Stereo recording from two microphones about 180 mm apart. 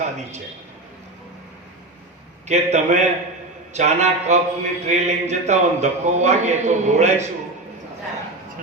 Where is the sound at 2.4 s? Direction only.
40° right (ahead or behind).